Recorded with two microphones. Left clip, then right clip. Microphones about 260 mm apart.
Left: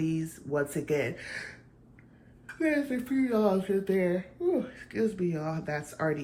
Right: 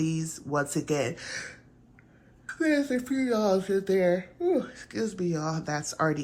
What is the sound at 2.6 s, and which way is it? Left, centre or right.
Speech, centre.